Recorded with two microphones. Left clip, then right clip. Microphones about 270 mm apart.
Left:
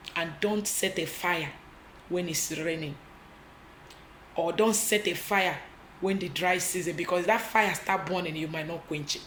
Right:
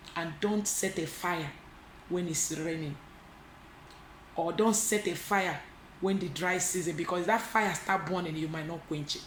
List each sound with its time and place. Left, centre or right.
0.0 s speech: centre
4.4 s speech: centre